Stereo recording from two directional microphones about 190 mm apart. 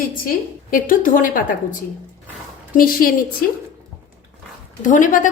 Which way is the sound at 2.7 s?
50° left (ahead or behind).